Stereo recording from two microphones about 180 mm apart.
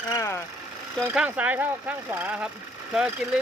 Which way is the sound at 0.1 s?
15° left (ahead or behind).